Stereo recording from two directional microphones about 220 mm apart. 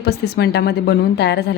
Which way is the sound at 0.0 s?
45° left (ahead or behind).